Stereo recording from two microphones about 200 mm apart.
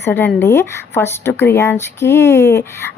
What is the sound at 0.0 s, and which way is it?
Speech, 10° left (ahead or behind).